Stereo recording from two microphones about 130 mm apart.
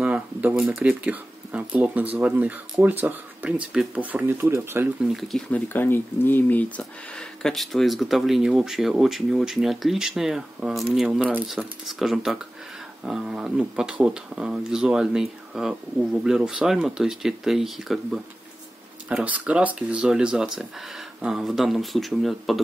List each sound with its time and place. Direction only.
0.0 s a sound: 10° right (ahead or behind)
0.7 s speech: 10° right (ahead or behind)
5.5 s speech: 15° left (ahead or behind)